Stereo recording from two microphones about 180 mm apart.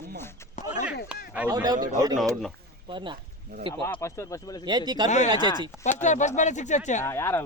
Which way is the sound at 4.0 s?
15° left (ahead or behind).